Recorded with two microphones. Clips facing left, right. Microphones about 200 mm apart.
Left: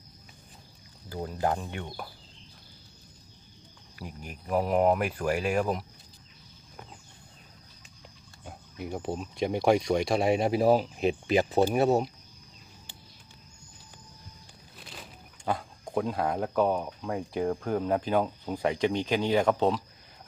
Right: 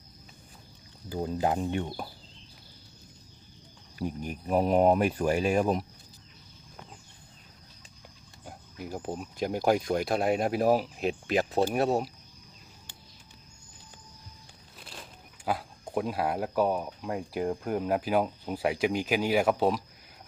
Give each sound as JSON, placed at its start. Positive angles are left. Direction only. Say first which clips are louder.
{"t": 1.1, "sound": "speech", "louder": "right 1 dB", "side_deg": -20}
{"t": 4.3, "sound": "speech", "louder": "right 1 dB", "side_deg": -20}
{"t": 8.4, "sound": "speech", "louder": "left 2 dB", "side_deg": 0}
{"t": 14.8, "sound": "a sound", "louder": "even", "side_deg": 0}
{"t": 15.4, "sound": "speech", "louder": "even", "side_deg": -5}